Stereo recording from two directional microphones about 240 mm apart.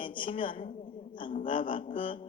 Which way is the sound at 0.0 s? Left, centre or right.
Left.